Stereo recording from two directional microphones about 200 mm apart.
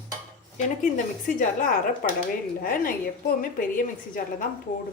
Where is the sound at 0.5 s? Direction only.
40° left (ahead or behind).